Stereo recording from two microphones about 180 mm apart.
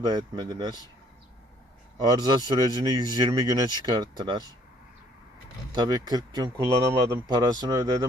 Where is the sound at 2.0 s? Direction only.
25° right (ahead or behind).